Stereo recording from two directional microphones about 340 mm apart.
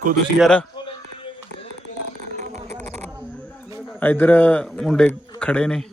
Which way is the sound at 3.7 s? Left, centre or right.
Centre.